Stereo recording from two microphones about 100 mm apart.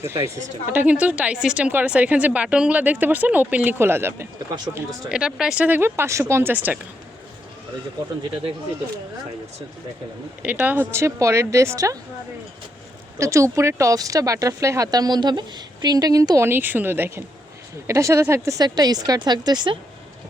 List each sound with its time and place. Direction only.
0.0 s a woman's voice: 30° right (ahead or behind)
5.0 s a woman's voice: 10° right (ahead or behind)
5.6 s speech: 20° right (ahead or behind)
10.4 s speech: 15° right (ahead or behind); by 11.9 s 30° right (ahead or behind)
13.1 s speech: 30° right (ahead or behind)
16.5 s speech: 20° right (ahead or behind); by 19.8 s 50° right (ahead or behind)